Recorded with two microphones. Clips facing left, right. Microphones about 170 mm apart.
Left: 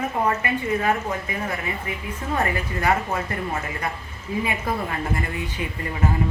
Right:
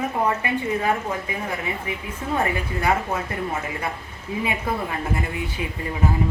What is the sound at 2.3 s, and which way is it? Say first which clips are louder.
Speech: right 1 dB; 10° right (ahead or behind).